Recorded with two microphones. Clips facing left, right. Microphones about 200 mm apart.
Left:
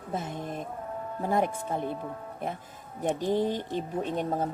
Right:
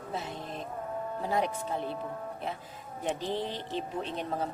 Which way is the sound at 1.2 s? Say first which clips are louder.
Left 4 dB; 50° left (ahead or behind).